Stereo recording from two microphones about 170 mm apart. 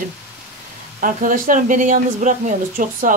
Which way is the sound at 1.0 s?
55° right (ahead or behind).